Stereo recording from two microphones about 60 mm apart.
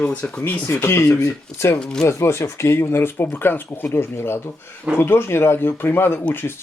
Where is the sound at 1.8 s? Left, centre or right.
Centre.